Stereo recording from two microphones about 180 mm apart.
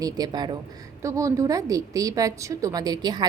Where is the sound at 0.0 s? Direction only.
20° right (ahead or behind).